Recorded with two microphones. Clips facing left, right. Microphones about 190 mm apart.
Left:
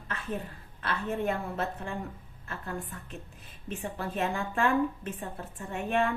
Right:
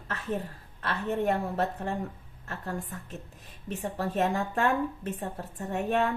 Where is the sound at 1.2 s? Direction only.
40° right (ahead or behind).